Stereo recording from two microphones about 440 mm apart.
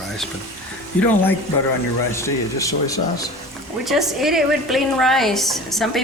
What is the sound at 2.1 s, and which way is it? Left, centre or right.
A woman's voice, centre.